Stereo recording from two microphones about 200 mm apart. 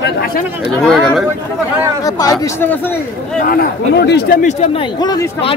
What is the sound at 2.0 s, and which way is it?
Speech, 20° left (ahead or behind).